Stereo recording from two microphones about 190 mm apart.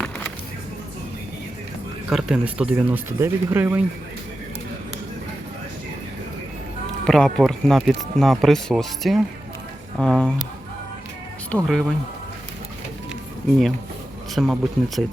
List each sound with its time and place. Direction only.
2.0 s speech: 5° right (ahead or behind)
7.0 s speech: 5° left (ahead or behind)
11.5 s speech: centre (ahead or behind)
14.3 s speech: centre (ahead or behind)